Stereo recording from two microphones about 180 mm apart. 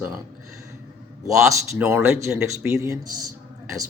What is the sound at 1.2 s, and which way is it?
Speech, 15° right (ahead or behind).